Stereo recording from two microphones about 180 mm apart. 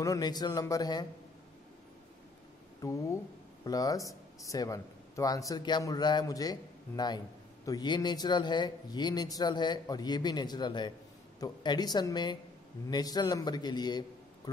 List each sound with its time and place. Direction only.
0.0 s speech: 20° left (ahead or behind)
2.8 s a man's voice: 15° left (ahead or behind)